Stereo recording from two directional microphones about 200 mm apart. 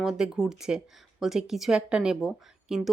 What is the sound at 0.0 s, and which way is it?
A woman's voice, 5° right (ahead or behind).